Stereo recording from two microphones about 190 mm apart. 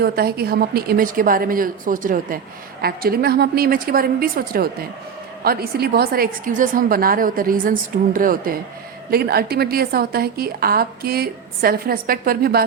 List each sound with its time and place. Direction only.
0.0 s a woman's voice: 55° right (ahead or behind)